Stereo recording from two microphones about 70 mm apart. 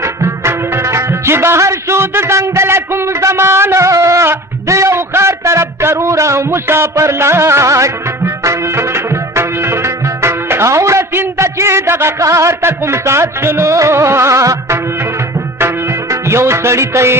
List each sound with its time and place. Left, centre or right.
0.0 s music: right
4.7 s a sound: right
12.2 s music: right